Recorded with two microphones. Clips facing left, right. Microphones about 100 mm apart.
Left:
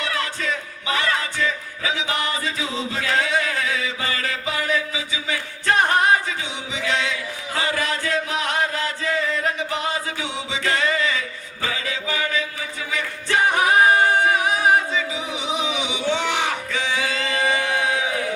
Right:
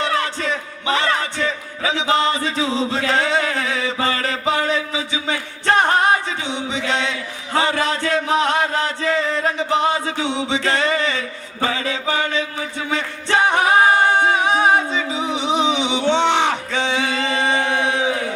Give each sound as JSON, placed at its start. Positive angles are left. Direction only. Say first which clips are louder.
{"t": 0.0, "sound": "music", "louder": "right 5 dB", "side_deg": -30}
{"t": 6.8, "sound": "chant", "louder": "even", "side_deg": -30}
{"t": 7.5, "sound": "music", "louder": "right 5 dB", "side_deg": -30}
{"t": 16.0, "sound": "a sound", "louder": "right 6 dB", "side_deg": -25}